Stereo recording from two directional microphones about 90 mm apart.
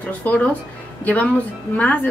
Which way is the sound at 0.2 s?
15° left (ahead or behind).